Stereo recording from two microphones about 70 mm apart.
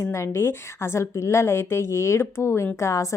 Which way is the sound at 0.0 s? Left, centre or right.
Left.